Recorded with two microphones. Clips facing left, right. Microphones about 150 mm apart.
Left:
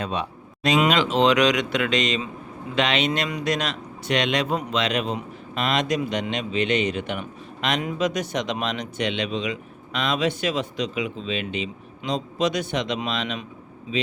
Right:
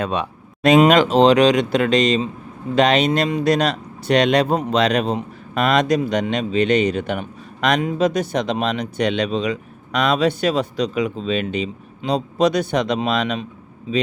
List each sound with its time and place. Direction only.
0.0 s speech: 60° right (ahead or behind)
0.8 s a man's voice: 40° right (ahead or behind)